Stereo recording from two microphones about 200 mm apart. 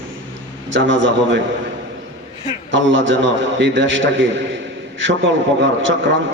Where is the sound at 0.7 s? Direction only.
70° right (ahead or behind).